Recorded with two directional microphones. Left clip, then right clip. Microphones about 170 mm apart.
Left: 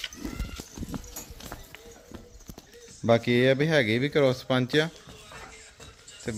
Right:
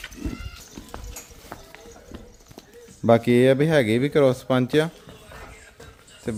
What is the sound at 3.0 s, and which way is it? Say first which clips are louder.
Speech: right 5 dB; 20° right (ahead or behind).